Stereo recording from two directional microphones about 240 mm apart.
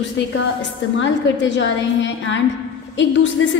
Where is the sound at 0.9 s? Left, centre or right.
Left.